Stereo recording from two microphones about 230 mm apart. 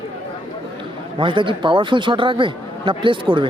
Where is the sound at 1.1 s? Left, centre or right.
Right.